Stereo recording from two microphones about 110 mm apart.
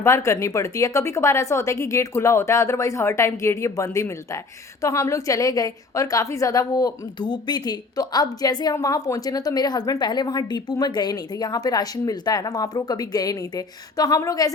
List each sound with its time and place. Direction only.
0.0 s a woman's voice: 25° left (ahead or behind)